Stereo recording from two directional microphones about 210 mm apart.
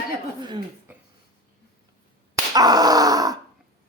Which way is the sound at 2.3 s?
20° right (ahead or behind).